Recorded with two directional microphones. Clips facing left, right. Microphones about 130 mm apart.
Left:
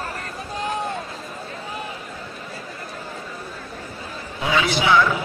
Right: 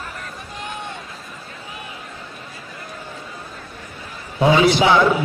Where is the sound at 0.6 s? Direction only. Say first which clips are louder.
Left 6 dB; 35° left (ahead or behind).